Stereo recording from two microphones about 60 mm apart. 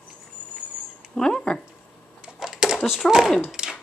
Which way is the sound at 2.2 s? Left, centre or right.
Centre.